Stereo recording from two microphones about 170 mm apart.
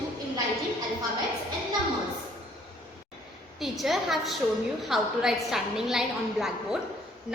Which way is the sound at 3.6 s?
Centre (ahead or behind).